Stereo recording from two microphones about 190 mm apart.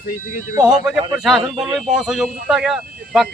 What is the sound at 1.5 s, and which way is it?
Speech, 20° right (ahead or behind).